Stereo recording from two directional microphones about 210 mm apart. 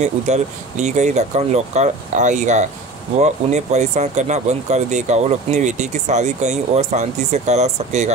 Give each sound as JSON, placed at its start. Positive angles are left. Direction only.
{"t": 0.0, "sound": "speech", "side_deg": -35}